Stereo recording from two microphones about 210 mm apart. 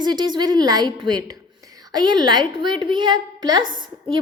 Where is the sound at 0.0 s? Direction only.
20° right (ahead or behind).